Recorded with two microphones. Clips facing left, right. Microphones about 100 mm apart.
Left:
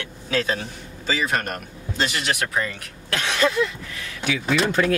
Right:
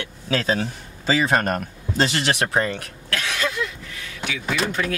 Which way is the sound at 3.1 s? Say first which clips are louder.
Left 4 dB; 30° left (ahead or behind).